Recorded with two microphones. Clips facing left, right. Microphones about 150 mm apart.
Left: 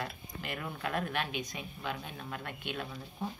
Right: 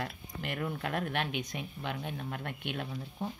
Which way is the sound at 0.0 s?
65° right (ahead or behind).